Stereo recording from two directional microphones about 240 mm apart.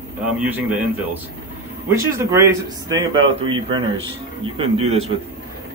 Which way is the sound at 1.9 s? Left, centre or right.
Centre.